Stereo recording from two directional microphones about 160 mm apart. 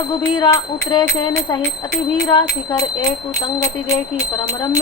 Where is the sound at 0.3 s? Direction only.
25° left (ahead or behind).